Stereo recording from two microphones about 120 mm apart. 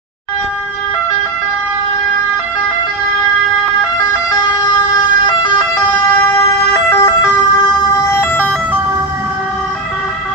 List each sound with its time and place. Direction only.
4.1 s emergency vehicle: 35° left (ahead or behind)
6.1 s emergency vehicle: 20° left (ahead or behind)
8.0 s ambulance: 20° left (ahead or behind)